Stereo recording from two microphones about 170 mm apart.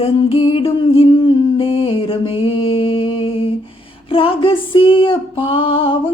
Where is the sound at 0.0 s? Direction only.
35° left (ahead or behind).